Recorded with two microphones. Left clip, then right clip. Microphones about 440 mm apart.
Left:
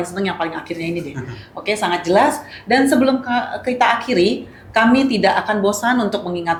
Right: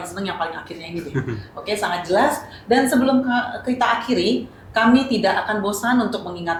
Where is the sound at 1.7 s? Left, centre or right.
Left.